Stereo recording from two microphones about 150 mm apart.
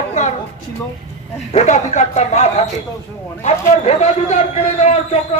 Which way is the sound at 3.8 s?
50° left (ahead or behind).